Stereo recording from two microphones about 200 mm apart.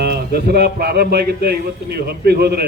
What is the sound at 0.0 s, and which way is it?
A man's voice, 55° right (ahead or behind).